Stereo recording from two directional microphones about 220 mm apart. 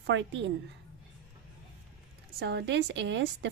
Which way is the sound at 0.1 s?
55° right (ahead or behind).